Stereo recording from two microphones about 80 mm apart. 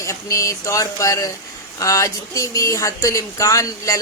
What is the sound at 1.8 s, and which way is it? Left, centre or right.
Speech, left.